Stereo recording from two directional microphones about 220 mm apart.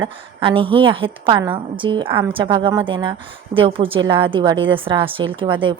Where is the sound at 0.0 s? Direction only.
20° right (ahead or behind).